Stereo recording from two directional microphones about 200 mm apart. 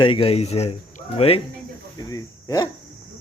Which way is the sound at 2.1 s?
15° left (ahead or behind).